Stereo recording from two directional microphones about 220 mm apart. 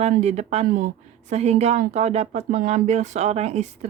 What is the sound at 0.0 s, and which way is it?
Speech, 30° right (ahead or behind).